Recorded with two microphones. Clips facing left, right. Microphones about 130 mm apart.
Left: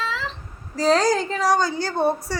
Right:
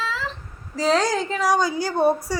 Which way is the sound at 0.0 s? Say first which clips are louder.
Even; 5° right (ahead or behind).